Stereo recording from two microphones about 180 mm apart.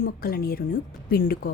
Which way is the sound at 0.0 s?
55° left (ahead or behind).